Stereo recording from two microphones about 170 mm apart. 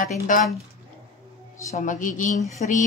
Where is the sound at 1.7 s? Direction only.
50° left (ahead or behind).